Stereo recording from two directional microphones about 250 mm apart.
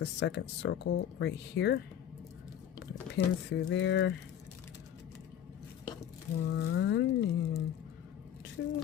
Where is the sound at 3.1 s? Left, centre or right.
Left.